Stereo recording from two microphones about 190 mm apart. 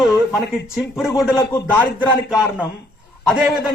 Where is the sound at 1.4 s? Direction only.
10° left (ahead or behind).